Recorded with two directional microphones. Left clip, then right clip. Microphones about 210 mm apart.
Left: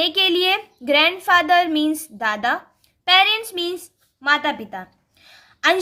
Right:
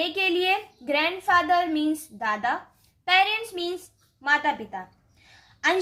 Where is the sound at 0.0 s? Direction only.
35° left (ahead or behind).